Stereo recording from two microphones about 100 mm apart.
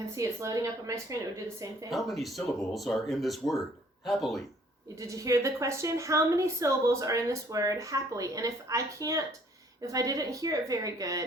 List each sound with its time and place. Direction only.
0.2 s a woman's voice: 35° right (ahead or behind)
1.9 s speech: centre (ahead or behind)
4.9 s a woman's voice: 35° right (ahead or behind)